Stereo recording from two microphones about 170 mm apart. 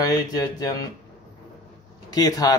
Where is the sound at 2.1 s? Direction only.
20° left (ahead or behind).